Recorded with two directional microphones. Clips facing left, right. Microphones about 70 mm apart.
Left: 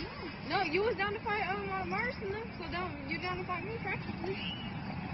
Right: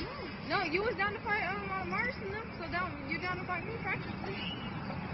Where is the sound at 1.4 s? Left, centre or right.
Right.